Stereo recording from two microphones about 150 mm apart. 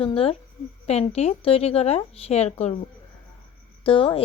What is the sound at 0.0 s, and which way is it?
A woman's voice, 40° left (ahead or behind).